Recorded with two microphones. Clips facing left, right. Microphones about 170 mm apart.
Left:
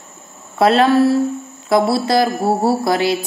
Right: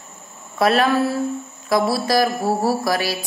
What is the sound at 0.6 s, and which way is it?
A woman's voice, 30° left (ahead or behind).